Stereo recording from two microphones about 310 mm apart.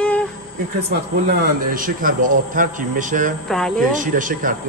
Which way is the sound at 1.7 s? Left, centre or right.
Right.